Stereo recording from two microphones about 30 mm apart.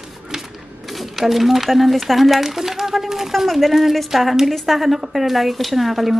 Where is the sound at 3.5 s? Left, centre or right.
Centre.